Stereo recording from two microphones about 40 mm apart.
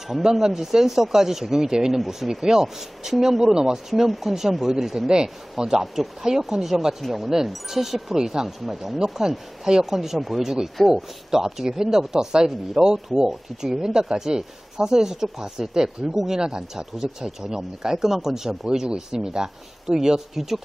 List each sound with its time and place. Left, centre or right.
0.1 s speech: centre